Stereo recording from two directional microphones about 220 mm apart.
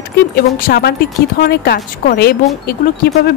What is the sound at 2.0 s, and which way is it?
Speech, 45° left (ahead or behind).